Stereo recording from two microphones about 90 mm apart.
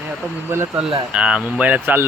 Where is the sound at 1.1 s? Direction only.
10° right (ahead or behind).